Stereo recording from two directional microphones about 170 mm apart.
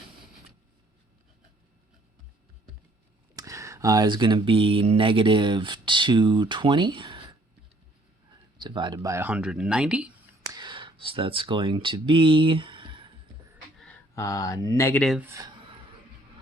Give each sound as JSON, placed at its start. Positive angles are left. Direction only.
{"t": 3.3, "sound": "speech", "side_deg": -20}
{"t": 8.5, "sound": "speech", "side_deg": -25}
{"t": 10.5, "sound": "speech", "side_deg": -25}
{"t": 14.2, "sound": "speech", "side_deg": 20}
{"t": 15.2, "sound": "speech", "side_deg": -20}